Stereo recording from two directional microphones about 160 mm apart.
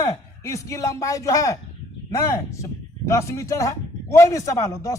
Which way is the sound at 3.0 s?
20° left (ahead or behind).